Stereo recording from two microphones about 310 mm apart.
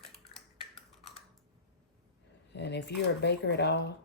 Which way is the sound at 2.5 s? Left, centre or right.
Left.